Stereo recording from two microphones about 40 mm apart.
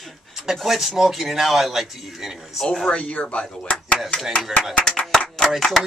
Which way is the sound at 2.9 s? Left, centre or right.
Left.